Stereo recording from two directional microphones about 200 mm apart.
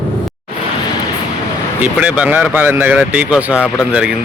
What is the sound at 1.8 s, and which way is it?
Speech, 5° right (ahead or behind).